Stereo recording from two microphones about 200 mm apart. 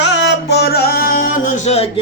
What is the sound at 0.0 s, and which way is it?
Music, 60° left (ahead or behind).